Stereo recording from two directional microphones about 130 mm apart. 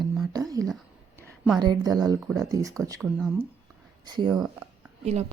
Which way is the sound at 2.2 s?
5° right (ahead or behind).